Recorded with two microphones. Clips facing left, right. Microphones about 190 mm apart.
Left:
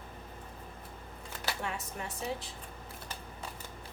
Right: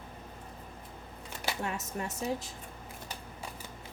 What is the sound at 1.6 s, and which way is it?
Speech, 45° right (ahead or behind).